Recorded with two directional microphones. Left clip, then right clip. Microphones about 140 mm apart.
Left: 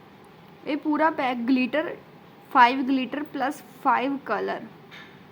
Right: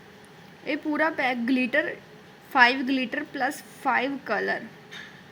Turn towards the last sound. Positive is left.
turn(degrees=-5)  # may be behind; listen again after turning